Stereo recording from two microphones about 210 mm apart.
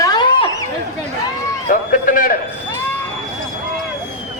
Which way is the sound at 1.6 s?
40° left (ahead or behind).